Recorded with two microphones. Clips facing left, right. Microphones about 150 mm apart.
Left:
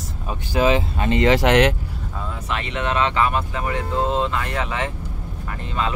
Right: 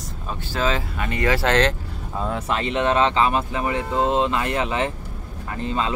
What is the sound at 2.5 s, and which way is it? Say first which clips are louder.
Speech: right 3 dB; 30° right (ahead or behind).